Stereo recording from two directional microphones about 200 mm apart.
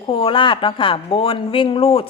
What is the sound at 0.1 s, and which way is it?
Speech, 25° left (ahead or behind).